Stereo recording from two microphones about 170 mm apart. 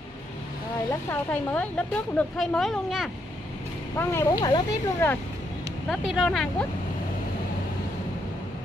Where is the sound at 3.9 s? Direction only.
15° left (ahead or behind).